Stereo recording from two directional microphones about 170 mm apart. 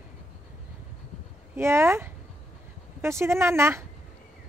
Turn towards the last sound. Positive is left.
turn(degrees=-15)  # may be behind; listen again after turning